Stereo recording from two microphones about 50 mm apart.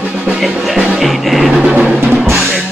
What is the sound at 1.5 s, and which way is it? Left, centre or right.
Music, centre.